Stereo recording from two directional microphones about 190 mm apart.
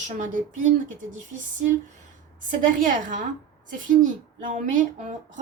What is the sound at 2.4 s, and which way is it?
Speech, 45° right (ahead or behind).